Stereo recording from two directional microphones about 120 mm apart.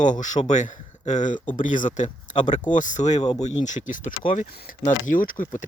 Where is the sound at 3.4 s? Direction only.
90° left.